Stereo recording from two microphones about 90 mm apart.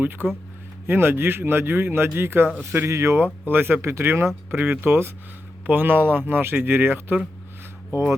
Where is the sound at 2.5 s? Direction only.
15° right (ahead or behind).